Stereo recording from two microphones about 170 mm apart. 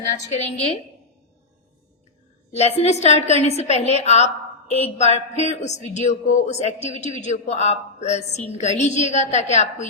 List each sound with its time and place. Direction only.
0.1 s a woman's voice: 40° left (ahead or behind)
2.5 s a woman's voice: 40° left (ahead or behind)